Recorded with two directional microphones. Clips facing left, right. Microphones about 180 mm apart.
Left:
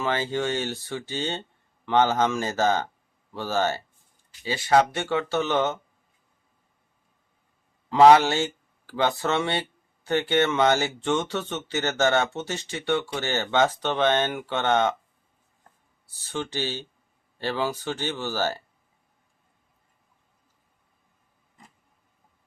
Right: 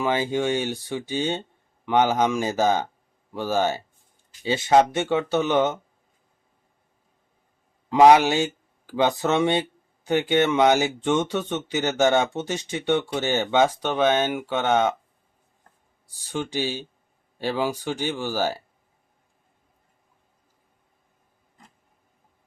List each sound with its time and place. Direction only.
0.0 s speech: 15° right (ahead or behind)
7.9 s speech: 15° right (ahead or behind)
16.0 s speech: 15° right (ahead or behind)